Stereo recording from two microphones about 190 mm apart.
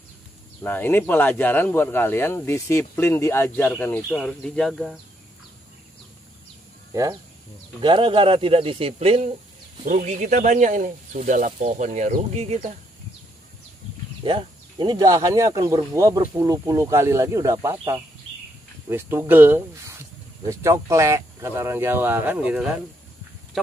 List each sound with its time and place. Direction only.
0.6 s speech: 10° left (ahead or behind)
6.9 s speech: 20° right (ahead or behind); by 12.7 s 35° right (ahead or behind)
14.2 s speech: 25° right (ahead or behind); by 22.6 s 10° right (ahead or behind)